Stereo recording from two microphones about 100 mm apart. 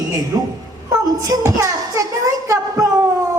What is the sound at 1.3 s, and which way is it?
Speech, 30° right (ahead or behind).